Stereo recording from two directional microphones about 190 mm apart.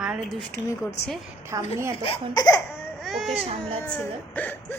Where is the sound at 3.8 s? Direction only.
10° left (ahead or behind).